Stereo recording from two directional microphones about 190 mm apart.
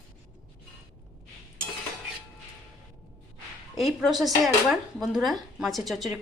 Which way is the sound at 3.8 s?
Centre (ahead or behind).